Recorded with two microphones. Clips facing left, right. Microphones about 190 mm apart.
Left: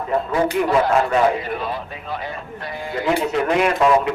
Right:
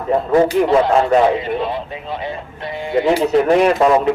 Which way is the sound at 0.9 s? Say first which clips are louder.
Right 4 dB; 25° right (ahead or behind).